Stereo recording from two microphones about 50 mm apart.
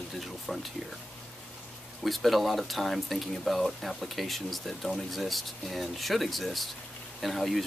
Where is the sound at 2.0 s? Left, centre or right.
Centre.